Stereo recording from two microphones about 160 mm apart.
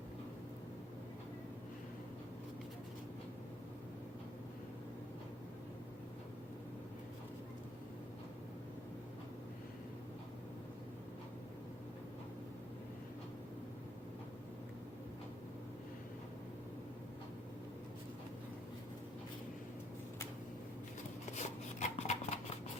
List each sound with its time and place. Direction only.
21.3 s rub: 45° left (ahead or behind)